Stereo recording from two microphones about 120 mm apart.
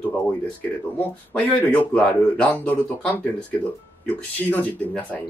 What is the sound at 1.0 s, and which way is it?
Speech, 15° left (ahead or behind).